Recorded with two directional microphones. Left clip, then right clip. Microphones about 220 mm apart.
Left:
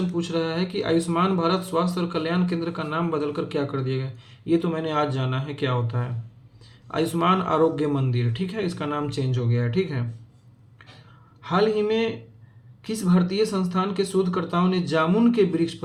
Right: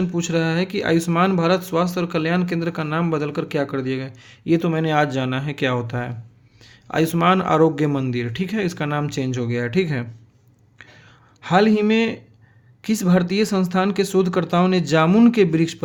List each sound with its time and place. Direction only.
0.2 s speech: 50° right (ahead or behind)
11.4 s speech: 50° right (ahead or behind)